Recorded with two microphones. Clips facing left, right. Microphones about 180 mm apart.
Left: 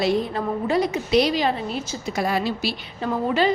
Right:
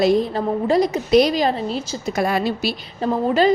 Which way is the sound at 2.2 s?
55° right (ahead or behind).